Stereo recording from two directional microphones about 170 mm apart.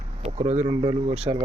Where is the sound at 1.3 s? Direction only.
25° right (ahead or behind).